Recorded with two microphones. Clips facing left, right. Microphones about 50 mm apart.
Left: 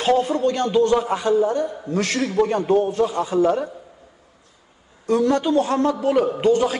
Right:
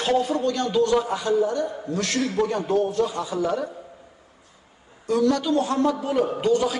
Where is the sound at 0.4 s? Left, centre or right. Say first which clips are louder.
Left 4 dB; left.